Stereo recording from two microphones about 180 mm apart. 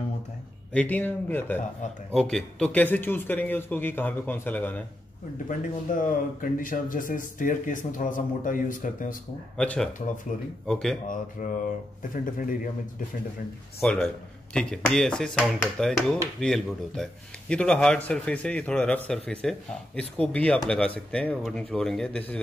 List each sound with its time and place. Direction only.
0.7 s a man's voice: 10° left (ahead or behind)
5.9 s speech: 50° left (ahead or behind)
9.6 s speech: 5° left (ahead or behind)
11.4 s speech: 45° left (ahead or behind)
13.7 s speech: 5° left (ahead or behind)